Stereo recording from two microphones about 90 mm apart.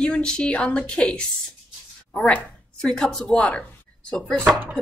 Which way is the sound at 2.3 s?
5° left (ahead or behind).